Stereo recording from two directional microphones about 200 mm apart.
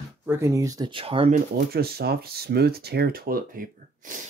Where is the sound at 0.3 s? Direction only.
15° right (ahead or behind).